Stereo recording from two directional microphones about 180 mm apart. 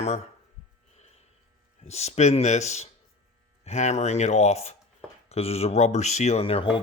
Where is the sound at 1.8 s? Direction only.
35° left (ahead or behind).